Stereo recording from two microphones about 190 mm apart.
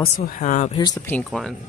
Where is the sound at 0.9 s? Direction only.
5° left (ahead or behind).